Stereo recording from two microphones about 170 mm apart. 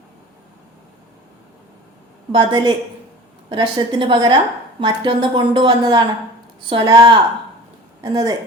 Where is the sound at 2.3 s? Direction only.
25° right (ahead or behind).